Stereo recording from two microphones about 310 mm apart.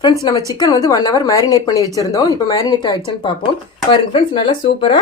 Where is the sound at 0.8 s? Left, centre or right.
Centre.